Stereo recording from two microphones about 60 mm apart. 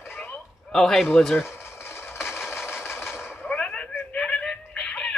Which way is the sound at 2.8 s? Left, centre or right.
Left.